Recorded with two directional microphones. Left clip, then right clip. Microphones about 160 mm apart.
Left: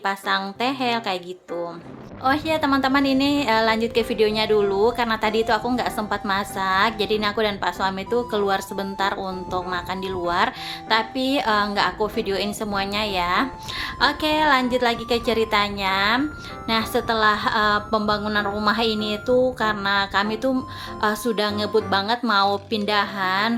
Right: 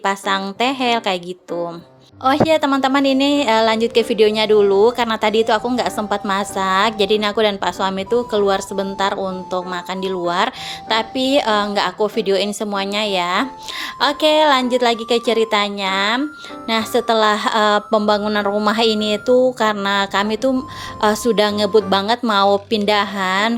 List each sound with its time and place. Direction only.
0.0 s a woman's voice: 40° right (ahead or behind)
2.2 s a woman's voice: 35° right (ahead or behind)